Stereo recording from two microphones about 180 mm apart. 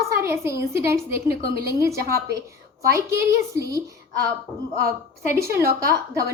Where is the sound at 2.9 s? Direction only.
15° right (ahead or behind).